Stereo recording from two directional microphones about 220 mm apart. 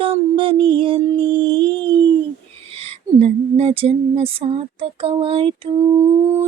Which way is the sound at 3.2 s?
25° right (ahead or behind).